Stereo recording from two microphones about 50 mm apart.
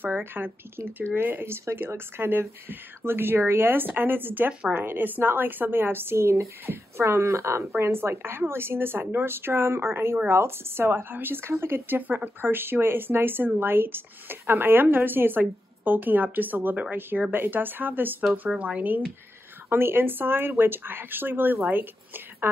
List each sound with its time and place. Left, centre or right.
0.0 s speech: right
6.6 s speech: right
7.8 s speech: right
11.4 s speech: right
18.6 s speech: right
19.7 s a woman's voice: right